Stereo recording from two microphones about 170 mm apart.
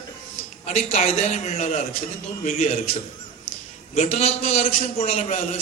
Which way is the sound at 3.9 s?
40° left (ahead or behind).